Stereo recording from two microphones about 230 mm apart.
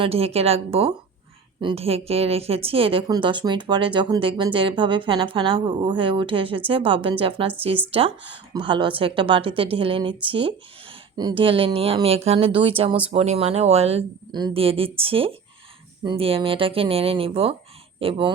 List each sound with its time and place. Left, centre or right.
0.0 s speech: right